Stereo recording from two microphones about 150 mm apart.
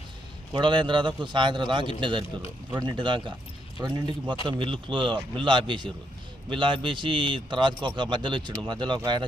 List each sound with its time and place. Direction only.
0.5 s a man's voice: 30° right (ahead or behind)